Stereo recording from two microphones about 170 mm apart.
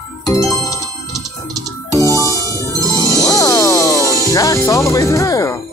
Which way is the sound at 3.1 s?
20° left (ahead or behind).